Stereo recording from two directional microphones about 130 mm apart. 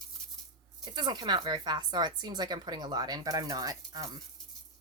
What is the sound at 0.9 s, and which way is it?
Speech, 35° right (ahead or behind).